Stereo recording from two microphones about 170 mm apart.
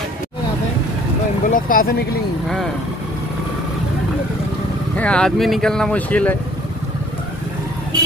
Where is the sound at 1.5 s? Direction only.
55° left (ahead or behind).